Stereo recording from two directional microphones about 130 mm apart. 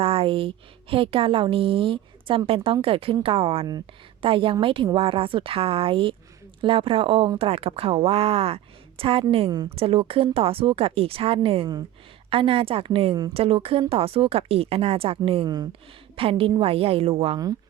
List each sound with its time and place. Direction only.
0.0 s a woman's voice: 50° right (ahead or behind)
3.7 s speech: 30° right (ahead or behind)
4.3 s a woman's voice: 40° right (ahead or behind)
15.4 s speech: 30° right (ahead or behind)
16.1 s a woman's voice: 45° right (ahead or behind)